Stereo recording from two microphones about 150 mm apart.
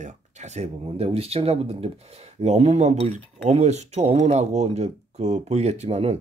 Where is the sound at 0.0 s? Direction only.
50° right (ahead or behind).